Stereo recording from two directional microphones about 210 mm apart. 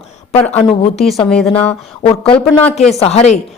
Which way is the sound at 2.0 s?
25° left (ahead or behind).